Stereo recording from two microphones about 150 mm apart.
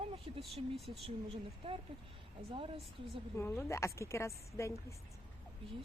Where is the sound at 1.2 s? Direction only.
40° right (ahead or behind).